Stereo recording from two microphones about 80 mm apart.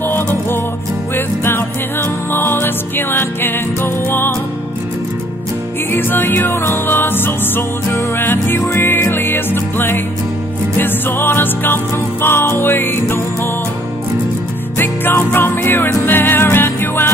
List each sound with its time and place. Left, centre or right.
0.0 s music: left
5.9 s music: left
14.8 s music: left